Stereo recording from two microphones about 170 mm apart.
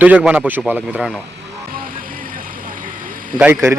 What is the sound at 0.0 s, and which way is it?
A man's voice, 10° right (ahead or behind).